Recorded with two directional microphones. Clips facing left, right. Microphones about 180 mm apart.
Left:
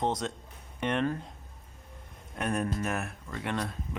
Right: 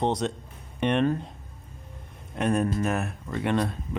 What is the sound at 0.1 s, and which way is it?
Speech, 70° right (ahead or behind).